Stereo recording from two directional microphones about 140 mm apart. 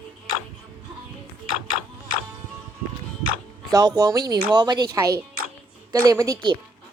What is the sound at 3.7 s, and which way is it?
Speech, 25° right (ahead or behind).